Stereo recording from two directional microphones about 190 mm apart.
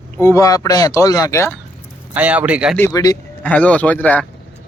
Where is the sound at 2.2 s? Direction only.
10° right (ahead or behind).